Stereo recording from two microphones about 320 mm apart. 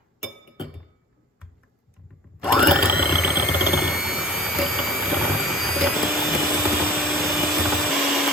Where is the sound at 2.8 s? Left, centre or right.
Right.